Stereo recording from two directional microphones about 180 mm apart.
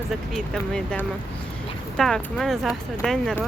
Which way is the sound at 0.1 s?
Centre (ahead or behind).